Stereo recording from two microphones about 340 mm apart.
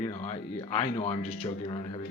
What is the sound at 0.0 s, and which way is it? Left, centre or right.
Speech, centre.